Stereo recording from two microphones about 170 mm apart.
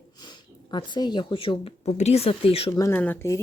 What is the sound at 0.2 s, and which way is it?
Speech, 25° left (ahead or behind).